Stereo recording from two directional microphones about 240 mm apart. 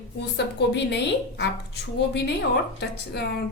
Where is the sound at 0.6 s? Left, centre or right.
Left.